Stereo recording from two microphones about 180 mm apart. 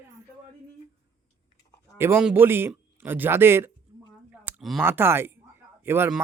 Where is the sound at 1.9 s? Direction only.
10° right (ahead or behind).